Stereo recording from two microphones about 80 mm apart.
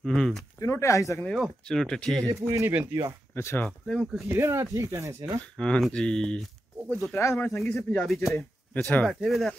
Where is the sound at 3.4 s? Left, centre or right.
Left.